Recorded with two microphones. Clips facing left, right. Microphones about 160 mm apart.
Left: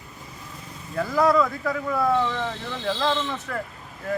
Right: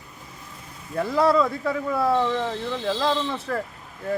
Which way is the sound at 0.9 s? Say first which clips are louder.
Even; 25° right (ahead or behind).